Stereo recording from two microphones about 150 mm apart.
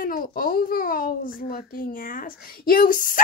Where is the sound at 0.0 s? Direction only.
70° left (ahead or behind).